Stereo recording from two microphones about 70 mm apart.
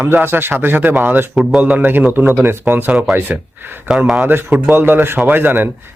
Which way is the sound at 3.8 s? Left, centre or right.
Centre.